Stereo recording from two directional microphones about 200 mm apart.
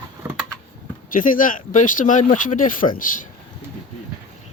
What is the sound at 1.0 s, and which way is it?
Speech, 45° left (ahead or behind).